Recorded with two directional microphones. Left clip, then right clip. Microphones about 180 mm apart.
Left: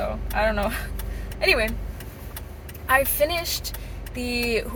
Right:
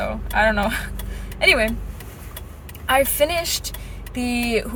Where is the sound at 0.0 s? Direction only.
20° right (ahead or behind).